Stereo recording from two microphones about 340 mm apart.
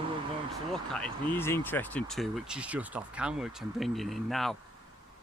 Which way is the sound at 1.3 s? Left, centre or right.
Centre.